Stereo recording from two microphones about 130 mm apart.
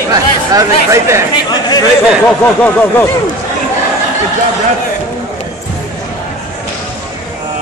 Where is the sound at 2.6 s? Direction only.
15° left (ahead or behind).